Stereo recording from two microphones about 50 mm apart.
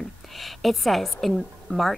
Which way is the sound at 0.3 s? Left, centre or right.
Centre.